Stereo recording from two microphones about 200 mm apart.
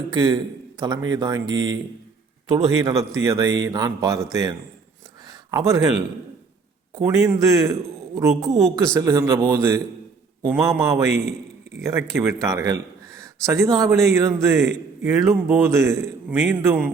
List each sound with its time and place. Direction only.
0.1 s a man's voice: 20° right (ahead or behind)
5.3 s a sound: 15° right (ahead or behind)
6.9 s a man's voice: 15° right (ahead or behind)